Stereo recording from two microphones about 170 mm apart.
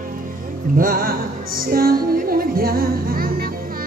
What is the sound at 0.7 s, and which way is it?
Music, 55° right (ahead or behind).